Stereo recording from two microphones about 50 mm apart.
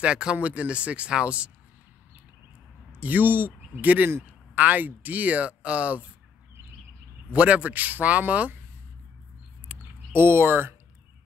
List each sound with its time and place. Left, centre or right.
0.0 s speech: centre
3.0 s speech: right
7.3 s speech: right
9.7 s a sound: right